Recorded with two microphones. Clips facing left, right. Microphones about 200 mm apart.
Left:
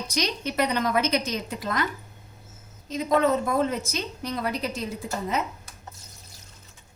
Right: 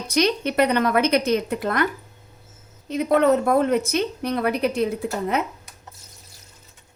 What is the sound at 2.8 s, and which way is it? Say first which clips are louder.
A woman's voice: right 5 dB; 65° right (ahead or behind).